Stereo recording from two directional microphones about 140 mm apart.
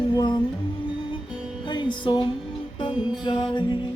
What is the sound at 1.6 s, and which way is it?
Music, 35° left (ahead or behind).